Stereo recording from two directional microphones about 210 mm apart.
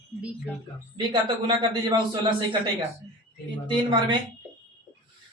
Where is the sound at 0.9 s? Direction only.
20° right (ahead or behind).